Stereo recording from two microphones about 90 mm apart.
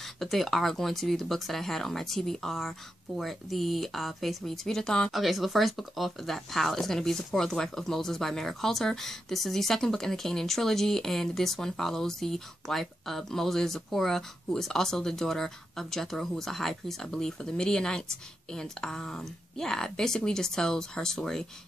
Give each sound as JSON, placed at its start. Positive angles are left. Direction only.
{"t": 0.2, "sound": "speech", "side_deg": 0}